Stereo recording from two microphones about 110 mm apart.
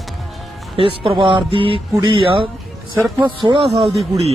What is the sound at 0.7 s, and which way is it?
Speech, 55° right (ahead or behind).